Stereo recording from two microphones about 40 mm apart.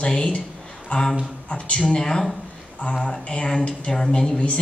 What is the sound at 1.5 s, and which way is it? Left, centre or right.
Speech, left.